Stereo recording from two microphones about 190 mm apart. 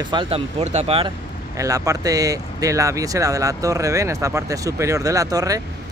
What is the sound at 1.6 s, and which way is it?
Speech, 15° right (ahead or behind).